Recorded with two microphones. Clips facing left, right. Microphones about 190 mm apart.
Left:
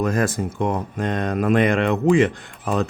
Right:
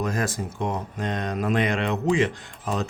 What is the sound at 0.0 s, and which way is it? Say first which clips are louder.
Speech: left 6 dB; 55° left (ahead or behind).